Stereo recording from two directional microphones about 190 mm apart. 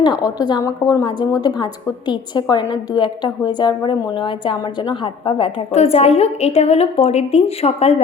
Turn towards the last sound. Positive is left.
turn(degrees=35)  # may be behind; listen again after turning